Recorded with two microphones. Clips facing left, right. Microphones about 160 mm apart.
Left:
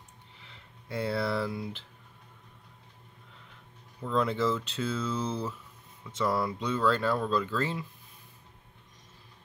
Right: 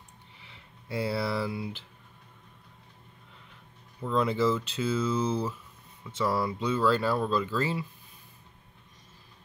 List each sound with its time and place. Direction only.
0.5 s speech: 5° right (ahead or behind)
4.0 s speech: 5° right (ahead or behind)